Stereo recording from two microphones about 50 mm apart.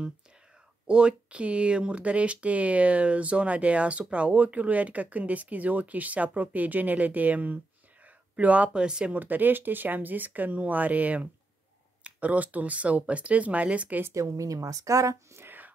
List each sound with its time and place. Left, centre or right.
0.8 s speech: right
9.1 s speech: right
14.1 s speech: right
15.4 s whispering: right